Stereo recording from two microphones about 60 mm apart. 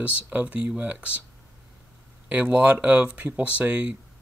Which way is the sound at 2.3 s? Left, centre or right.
Right.